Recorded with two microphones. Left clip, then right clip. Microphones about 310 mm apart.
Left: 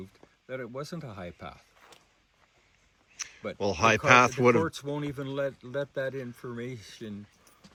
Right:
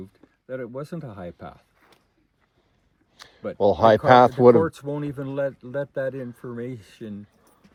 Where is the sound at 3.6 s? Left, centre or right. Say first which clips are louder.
Right 8 dB; centre.